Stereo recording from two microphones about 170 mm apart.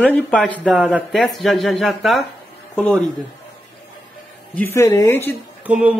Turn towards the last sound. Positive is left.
turn(degrees=-5)  # may be behind; listen again after turning